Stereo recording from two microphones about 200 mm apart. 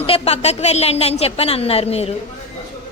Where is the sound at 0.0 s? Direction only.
30° left (ahead or behind).